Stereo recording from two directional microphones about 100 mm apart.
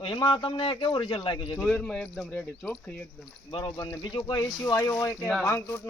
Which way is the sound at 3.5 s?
55° left (ahead or behind).